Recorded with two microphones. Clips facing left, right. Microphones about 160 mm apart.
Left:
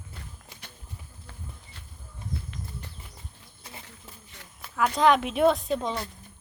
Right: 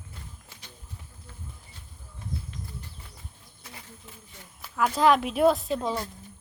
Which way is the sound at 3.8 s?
80° left.